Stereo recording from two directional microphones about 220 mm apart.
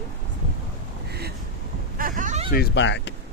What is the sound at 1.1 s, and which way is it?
Vehicle, 45° right (ahead or behind).